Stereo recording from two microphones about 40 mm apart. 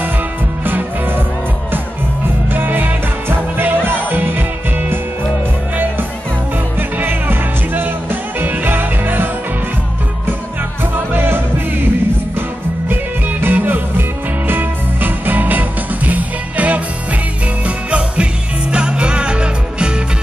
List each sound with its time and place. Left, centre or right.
0.7 s music: right
2.5 s music: right
7.0 s music: right
11.1 s music: right